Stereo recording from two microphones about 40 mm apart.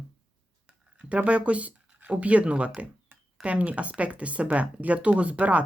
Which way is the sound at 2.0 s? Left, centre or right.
Right.